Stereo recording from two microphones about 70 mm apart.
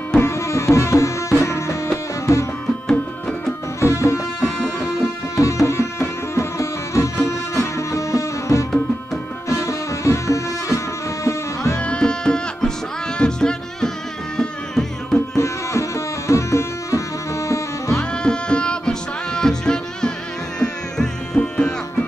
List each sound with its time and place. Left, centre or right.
0.2 s music: left
2.9 s music: centre
3.8 s music: left
4.8 s tabla: left
9.5 s music: left
11.8 s music: centre
15.3 s music: left
18.1 s music: centre